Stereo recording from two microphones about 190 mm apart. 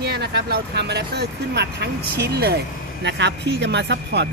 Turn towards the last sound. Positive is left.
turn(degrees=-65)  # may be behind; listen again after turning